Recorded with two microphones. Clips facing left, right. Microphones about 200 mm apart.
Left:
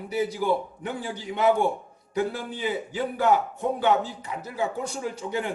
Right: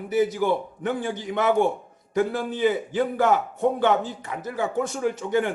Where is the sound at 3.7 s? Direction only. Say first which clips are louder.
Right 2 dB; 50° right (ahead or behind).